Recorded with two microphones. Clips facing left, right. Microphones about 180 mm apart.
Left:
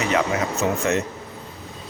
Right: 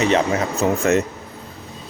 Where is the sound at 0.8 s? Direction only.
45° right (ahead or behind).